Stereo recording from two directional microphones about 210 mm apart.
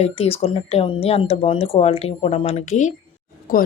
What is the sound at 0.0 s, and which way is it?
Speech, 30° left (ahead or behind).